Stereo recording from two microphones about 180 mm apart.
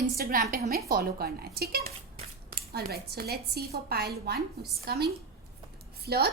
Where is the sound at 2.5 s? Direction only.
60° right (ahead or behind).